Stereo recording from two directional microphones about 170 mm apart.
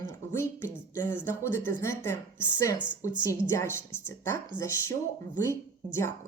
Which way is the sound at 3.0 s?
20° left (ahead or behind).